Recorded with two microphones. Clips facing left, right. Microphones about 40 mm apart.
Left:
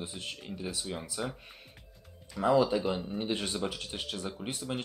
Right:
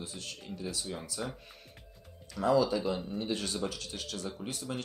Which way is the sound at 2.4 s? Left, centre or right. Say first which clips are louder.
Left 1 dB; left.